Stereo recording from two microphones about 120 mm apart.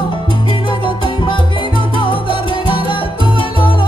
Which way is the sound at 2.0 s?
45° left (ahead or behind).